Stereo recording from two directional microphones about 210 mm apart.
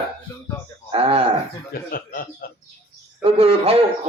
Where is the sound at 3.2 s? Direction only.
25° right (ahead or behind).